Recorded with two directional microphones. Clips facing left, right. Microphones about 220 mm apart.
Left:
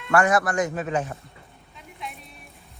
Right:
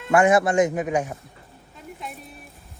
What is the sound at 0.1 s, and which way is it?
A man's voice, 25° right (ahead or behind).